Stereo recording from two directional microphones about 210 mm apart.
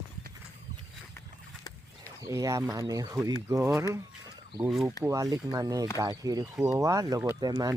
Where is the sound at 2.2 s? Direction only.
15° right (ahead or behind).